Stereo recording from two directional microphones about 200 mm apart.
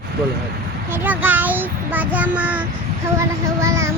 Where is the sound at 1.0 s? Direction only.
10° right (ahead or behind).